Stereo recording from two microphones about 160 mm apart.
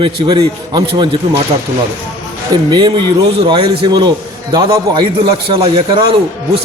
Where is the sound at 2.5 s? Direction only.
30° right (ahead or behind).